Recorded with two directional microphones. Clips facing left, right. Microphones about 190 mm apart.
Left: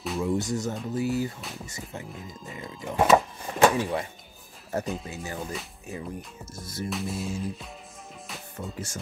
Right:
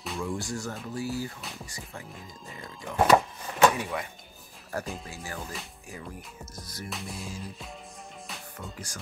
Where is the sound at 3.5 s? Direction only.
30° left (ahead or behind).